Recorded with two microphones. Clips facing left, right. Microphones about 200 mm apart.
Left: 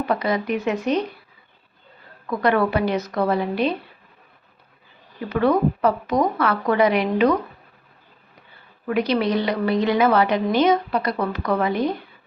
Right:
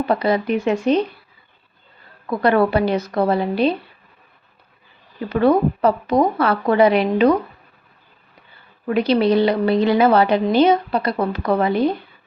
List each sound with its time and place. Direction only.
0.0 s speech: 30° right (ahead or behind)
2.2 s a woman's voice: 30° right (ahead or behind)
5.3 s a woman's voice: 30° right (ahead or behind)
8.9 s a woman's voice: 30° right (ahead or behind)